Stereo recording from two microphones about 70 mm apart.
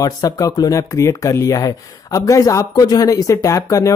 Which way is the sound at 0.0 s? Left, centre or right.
Left.